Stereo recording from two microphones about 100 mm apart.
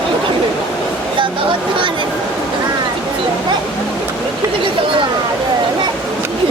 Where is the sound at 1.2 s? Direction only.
55° right (ahead or behind).